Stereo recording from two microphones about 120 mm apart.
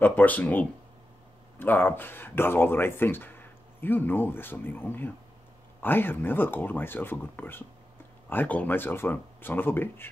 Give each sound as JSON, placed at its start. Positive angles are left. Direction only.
{"t": 0.0, "sound": "speech", "side_deg": 15}